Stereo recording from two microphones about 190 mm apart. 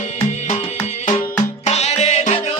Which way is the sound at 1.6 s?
35° left (ahead or behind).